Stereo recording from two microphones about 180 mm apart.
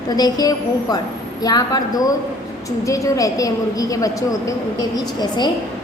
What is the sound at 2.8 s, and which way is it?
A woman's voice, 15° left (ahead or behind).